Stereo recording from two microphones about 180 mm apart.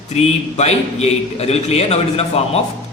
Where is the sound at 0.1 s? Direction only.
35° left (ahead or behind).